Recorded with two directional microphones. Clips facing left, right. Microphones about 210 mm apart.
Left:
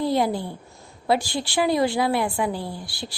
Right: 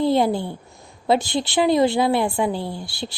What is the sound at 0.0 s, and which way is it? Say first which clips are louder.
A woman's voice: right 4 dB; 25° right (ahead or behind).